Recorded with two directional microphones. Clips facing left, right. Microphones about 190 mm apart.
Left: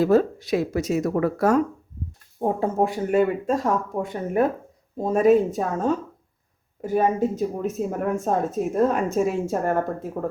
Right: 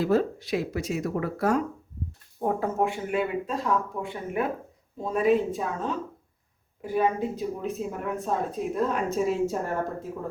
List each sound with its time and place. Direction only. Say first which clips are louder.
0.0 s speech: left 5 dB; 45° left (ahead or behind)
2.4 s speech: left 4 dB; 25° left (ahead or behind); by 9.7 s 55° left (ahead or behind)